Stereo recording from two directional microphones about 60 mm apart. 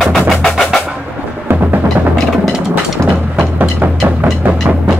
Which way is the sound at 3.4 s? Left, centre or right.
Right.